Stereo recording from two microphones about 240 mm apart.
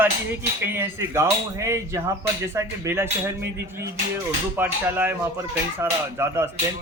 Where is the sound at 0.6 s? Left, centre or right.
Centre.